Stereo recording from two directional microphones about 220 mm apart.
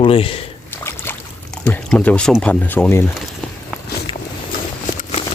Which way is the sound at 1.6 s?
5° left (ahead or behind).